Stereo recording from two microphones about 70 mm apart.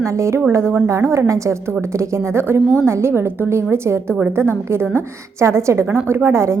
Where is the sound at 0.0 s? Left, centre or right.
Right.